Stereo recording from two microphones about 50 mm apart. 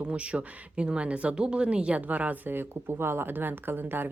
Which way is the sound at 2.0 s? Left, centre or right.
Right.